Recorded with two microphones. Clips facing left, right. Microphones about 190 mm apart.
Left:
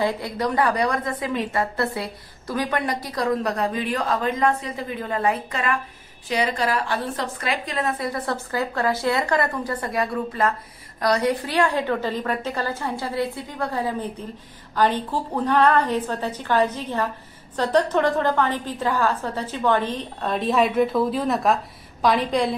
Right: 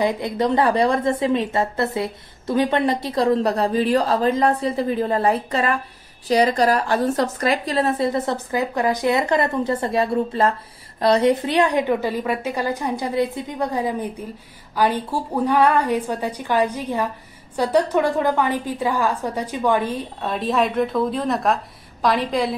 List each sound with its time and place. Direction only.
0.0 s a woman's voice: 20° right (ahead or behind); by 22.5 s centre (ahead or behind)